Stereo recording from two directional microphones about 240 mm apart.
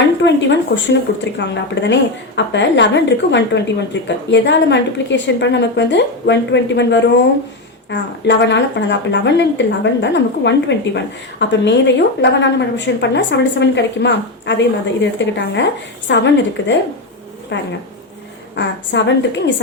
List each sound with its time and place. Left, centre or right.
0.2 s speech: left